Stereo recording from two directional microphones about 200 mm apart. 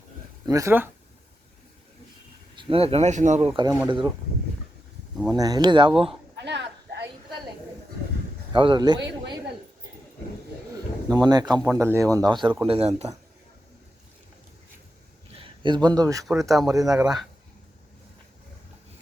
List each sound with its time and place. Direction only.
0.4 s speech: 15° right (ahead or behind)
2.6 s speech: 25° right (ahead or behind)
3.5 s speech: 20° right (ahead or behind)
5.3 s speech: 20° right (ahead or behind)
6.3 s a sound: 60° right (ahead or behind)
8.5 s speech: 25° right (ahead or behind)
9.0 s a woman's voice: 60° right (ahead or behind)
11.1 s speech: 20° right (ahead or behind)
15.4 s a man's voice: 25° right (ahead or behind)
16.2 s speech: centre (ahead or behind)